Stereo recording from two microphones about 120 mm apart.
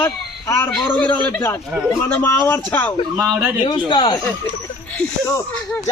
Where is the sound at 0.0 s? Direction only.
20° left (ahead or behind).